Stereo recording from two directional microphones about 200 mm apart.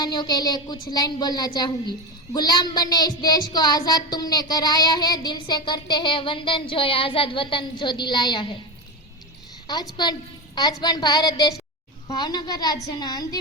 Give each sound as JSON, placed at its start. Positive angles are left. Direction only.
{"t": 0.0, "sound": "a woman's voice", "side_deg": 20}
{"t": 10.0, "sound": "a woman's voice", "side_deg": 20}